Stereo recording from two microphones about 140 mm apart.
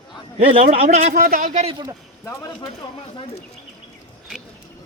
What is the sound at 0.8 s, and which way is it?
Speech, 55° right (ahead or behind).